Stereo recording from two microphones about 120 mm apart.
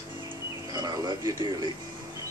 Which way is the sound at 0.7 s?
30° right (ahead or behind).